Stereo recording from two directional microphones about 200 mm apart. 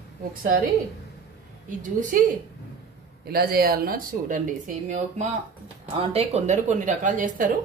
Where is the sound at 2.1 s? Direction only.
40° right (ahead or behind).